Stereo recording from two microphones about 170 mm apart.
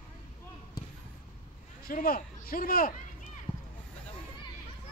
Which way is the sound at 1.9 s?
60° left (ahead or behind).